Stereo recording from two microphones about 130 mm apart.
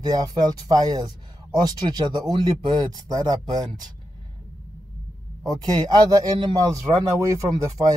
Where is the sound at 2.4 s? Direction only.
30° right (ahead or behind).